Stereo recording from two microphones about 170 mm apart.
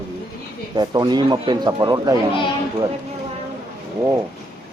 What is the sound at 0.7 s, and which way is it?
A man's voice, 25° right (ahead or behind).